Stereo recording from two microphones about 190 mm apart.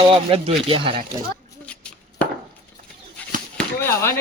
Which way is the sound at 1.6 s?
5° left (ahead or behind).